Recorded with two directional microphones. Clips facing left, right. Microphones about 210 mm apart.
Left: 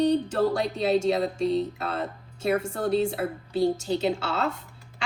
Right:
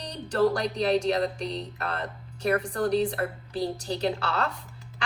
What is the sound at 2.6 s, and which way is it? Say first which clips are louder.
A woman's voice: even; 25° left (ahead or behind).